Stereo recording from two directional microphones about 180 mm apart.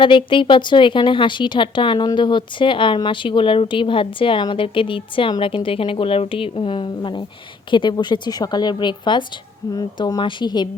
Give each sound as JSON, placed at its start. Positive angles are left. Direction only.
{"t": 0.0, "sound": "speech", "side_deg": 30}